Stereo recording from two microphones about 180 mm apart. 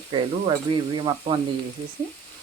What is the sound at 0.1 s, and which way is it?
Speech, 25° right (ahead or behind).